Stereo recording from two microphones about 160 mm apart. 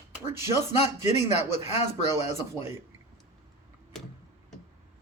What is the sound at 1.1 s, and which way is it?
Speech, 45° left (ahead or behind).